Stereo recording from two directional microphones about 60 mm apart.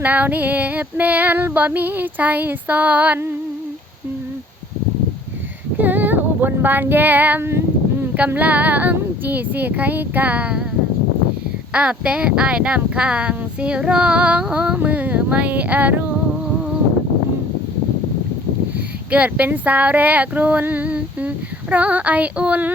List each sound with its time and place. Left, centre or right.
0.0 s female singing: right
5.7 s female singing: right
11.7 s female singing: centre
14.5 s a sound: centre
14.8 s female singing: right
19.1 s female singing: right